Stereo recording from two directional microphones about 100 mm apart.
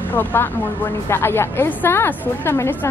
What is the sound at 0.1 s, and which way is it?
A woman's voice, 20° left (ahead or behind).